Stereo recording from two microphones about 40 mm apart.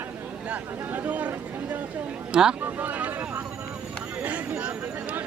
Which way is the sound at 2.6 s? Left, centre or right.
Right.